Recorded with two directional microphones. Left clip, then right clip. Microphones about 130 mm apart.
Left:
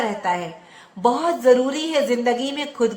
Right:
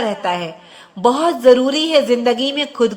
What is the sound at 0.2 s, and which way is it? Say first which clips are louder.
A woman's voice: right 3 dB; 30° right (ahead or behind).